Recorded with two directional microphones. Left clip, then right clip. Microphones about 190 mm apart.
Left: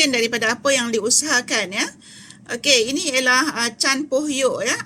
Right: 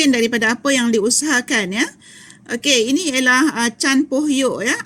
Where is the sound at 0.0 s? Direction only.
55° right (ahead or behind).